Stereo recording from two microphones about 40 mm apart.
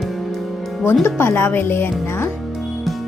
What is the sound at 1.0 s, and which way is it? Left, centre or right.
Speech, left.